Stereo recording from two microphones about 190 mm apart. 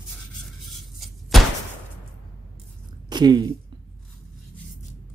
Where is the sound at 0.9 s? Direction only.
Centre (ahead or behind).